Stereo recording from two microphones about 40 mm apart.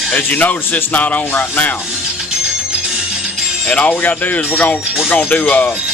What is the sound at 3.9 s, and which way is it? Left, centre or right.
Speech, left.